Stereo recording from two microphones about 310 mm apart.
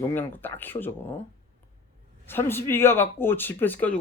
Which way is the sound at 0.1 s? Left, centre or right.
Centre.